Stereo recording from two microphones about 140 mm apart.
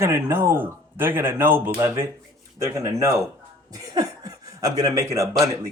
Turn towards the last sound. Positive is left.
turn(degrees=-20)  # may be behind; listen again after turning